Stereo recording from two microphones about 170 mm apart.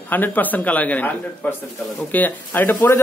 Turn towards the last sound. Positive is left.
turn(degrees=10)  # may be behind; listen again after turning